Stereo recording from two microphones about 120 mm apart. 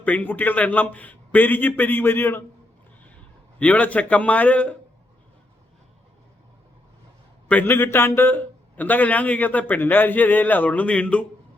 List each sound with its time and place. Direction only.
0.0 s a man's voice: 15° left (ahead or behind)
3.6 s a man's voice: 10° left (ahead or behind)
7.4 s a man's voice: 15° left (ahead or behind)